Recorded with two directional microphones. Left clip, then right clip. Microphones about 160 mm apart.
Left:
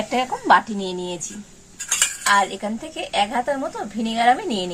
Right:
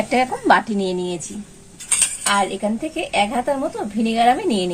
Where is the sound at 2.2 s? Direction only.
20° right (ahead or behind).